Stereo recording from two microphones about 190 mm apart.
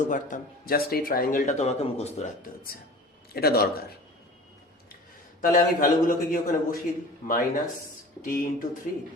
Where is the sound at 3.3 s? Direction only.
55° left (ahead or behind).